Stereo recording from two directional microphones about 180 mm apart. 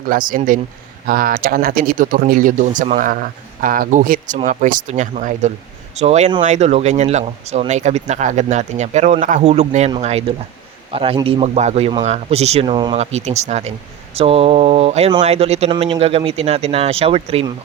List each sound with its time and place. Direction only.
0.1 s speech: 50° right (ahead or behind); by 13.0 s 25° right (ahead or behind)
13.0 s speech: 35° right (ahead or behind)